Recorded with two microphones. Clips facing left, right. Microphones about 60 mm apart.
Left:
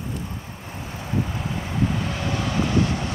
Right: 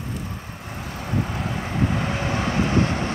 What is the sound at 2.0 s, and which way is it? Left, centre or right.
Vehicle, right.